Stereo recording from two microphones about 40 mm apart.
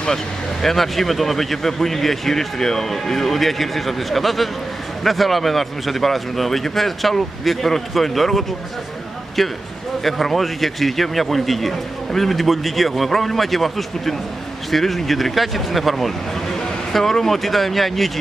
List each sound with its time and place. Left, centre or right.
0.0 s speech: centre